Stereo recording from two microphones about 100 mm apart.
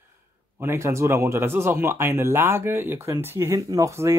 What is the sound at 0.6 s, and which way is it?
Speech, 25° right (ahead or behind).